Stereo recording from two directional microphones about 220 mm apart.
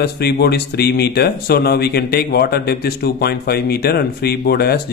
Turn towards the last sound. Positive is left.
turn(degrees=45)  # may be behind; listen again after turning